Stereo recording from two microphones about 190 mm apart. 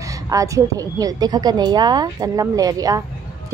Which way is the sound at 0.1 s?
15° right (ahead or behind).